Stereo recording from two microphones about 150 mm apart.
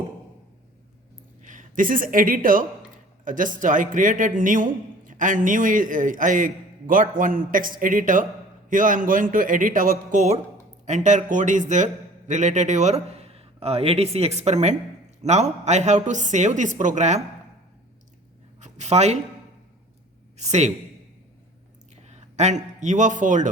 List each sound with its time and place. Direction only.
1.4 s a man's voice: 60° right (ahead or behind)
18.6 s speech: 50° right (ahead or behind)
20.3 s speech: 50° right (ahead or behind)
22.1 s a man's voice: 50° right (ahead or behind)